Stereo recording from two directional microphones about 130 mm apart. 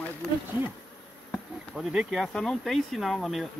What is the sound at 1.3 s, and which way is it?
Insect, centre (ahead or behind).